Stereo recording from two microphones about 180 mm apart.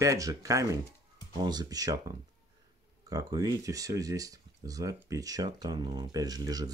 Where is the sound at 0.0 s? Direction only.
20° right (ahead or behind).